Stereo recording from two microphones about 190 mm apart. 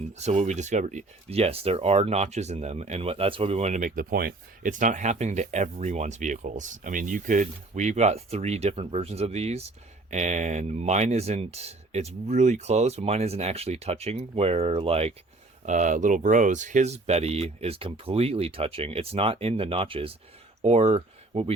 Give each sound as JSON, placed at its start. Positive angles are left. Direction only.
{"t": 0.1, "sound": "speech", "side_deg": -35}